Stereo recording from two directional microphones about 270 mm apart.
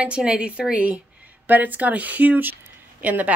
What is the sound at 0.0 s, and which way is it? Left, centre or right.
A woman's voice, centre.